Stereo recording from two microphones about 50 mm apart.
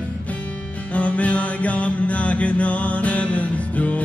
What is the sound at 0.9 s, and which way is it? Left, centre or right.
Mantra, left.